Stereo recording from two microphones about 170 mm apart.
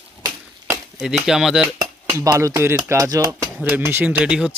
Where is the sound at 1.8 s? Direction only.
20° right (ahead or behind).